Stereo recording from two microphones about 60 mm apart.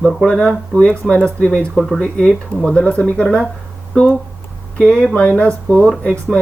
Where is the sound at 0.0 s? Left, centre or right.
Centre.